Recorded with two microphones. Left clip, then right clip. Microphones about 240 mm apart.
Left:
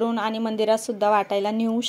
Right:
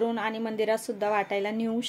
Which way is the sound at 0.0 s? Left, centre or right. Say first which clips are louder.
Left 4 dB; left.